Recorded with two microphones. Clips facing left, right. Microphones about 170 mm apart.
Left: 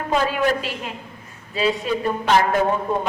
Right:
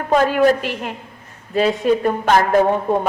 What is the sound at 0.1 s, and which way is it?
A man's voice, 50° right (ahead or behind).